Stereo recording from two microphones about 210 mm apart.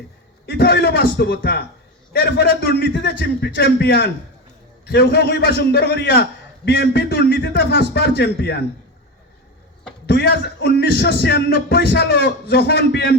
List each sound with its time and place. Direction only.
0.4 s a man's voice: 50° left (ahead or behind)
10.1 s a man's voice: 50° left (ahead or behind)